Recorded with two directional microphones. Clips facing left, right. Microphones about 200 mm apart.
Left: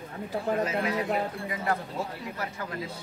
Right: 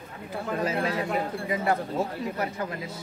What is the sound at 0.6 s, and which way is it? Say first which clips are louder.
Speech: right 1 dB; 30° right (ahead or behind).